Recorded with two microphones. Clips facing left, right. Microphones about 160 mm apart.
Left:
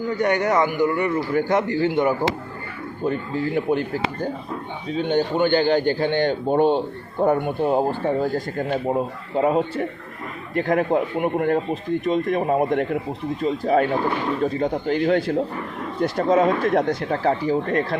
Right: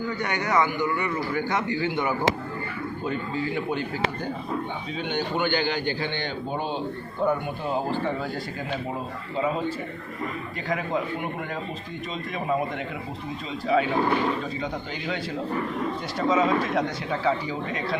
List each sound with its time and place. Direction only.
0.2 s a man's voice: 45° left (ahead or behind)
3.1 s a man's voice: 50° left (ahead or behind)